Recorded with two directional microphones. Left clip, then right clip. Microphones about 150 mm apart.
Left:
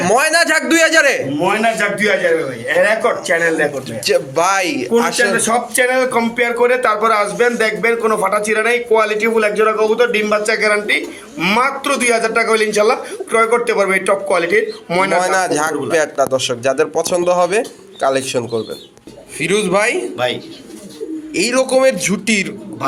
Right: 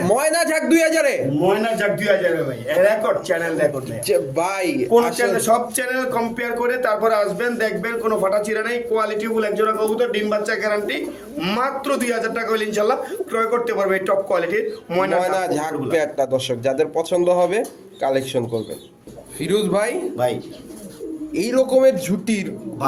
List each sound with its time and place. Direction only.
0.0 s a man's voice: 5° left (ahead or behind)
1.6 s a man's voice: 35° left (ahead or behind); by 3.7 s 50° left (ahead or behind)
4.0 s a man's voice: 10° left (ahead or behind)
5.1 s speech: 50° left (ahead or behind)
15.2 s a man's voice: centre (ahead or behind)
20.1 s a man's voice: 15° right (ahead or behind)
21.3 s a man's voice: 10° left (ahead or behind)